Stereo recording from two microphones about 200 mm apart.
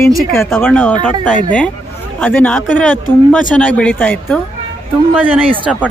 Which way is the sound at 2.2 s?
10° left (ahead or behind).